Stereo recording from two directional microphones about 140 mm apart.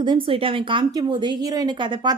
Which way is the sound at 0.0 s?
35° right (ahead or behind).